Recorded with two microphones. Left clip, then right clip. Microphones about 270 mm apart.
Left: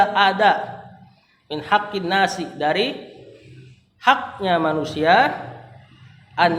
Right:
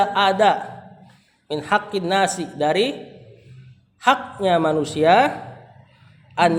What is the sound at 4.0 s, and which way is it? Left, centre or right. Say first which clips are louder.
Speech: even; right.